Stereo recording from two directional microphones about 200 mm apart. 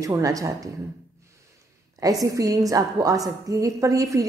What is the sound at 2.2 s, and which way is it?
A woman's voice, 15° right (ahead or behind).